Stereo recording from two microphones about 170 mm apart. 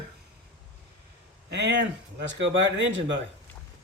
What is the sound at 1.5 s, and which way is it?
Speech, 90° right.